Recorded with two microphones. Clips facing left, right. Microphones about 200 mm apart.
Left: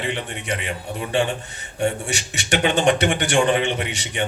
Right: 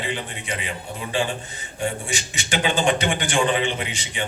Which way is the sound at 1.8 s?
70° left (ahead or behind).